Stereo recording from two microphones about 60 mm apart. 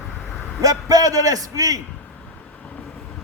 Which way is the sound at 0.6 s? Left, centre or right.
Right.